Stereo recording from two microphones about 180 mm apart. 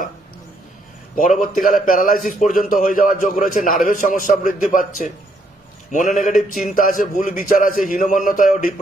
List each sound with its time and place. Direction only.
1.1 s a man's voice: 45° left (ahead or behind)